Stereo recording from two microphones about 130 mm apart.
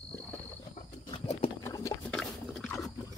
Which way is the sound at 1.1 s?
45° left (ahead or behind).